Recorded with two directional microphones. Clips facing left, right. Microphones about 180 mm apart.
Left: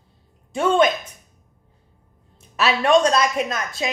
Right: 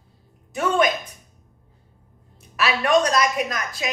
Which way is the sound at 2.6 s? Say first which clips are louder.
Left 2 dB; 25° left (ahead or behind).